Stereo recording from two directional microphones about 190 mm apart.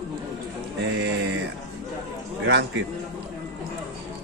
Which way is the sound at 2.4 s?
70° right (ahead or behind).